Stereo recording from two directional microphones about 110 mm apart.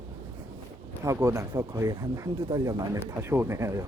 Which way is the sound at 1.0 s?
25° right (ahead or behind).